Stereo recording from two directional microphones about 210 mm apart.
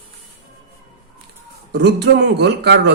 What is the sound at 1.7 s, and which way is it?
Speech, 50° right (ahead or behind).